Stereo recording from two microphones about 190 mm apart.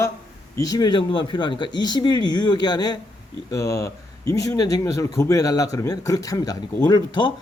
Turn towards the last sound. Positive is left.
turn(degrees=20)  # may be behind; listen again after turning